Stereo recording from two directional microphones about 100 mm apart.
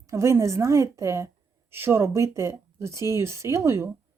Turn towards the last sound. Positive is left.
turn(degrees=-30)  # may be behind; listen again after turning